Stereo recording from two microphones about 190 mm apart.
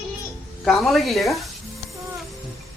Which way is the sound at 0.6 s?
Centre (ahead or behind).